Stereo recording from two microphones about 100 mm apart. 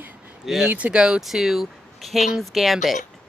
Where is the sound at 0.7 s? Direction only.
15° right (ahead or behind).